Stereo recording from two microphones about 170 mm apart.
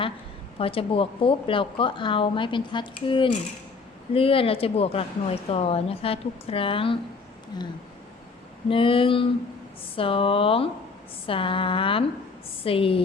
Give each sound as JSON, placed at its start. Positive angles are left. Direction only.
{"t": 0.6, "sound": "a woman's voice", "side_deg": 35}
{"t": 8.7, "sound": "a woman's voice", "side_deg": 30}